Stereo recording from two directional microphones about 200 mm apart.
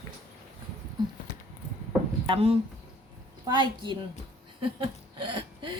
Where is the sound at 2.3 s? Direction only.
30° right (ahead or behind).